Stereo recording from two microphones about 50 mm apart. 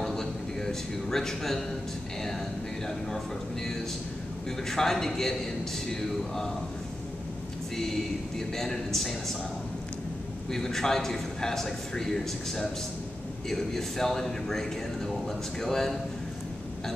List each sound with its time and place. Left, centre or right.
0.0 s a sound: centre
4.6 s a man's voice: centre
8.4 s a man's voice: centre
10.5 s a man's voice: centre